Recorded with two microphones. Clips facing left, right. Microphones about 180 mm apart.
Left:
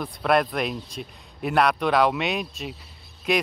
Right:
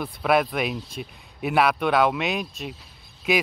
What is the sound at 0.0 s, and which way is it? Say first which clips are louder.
Speech: even; 5° right (ahead or behind).